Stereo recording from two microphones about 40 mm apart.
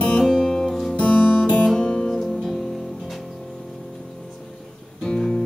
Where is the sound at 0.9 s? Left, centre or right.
Left; by 3.1 s centre.